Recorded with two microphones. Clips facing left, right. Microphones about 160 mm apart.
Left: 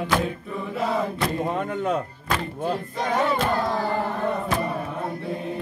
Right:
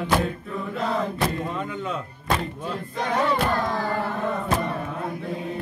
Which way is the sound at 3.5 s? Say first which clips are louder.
Left 1 dB; 20° left (ahead or behind).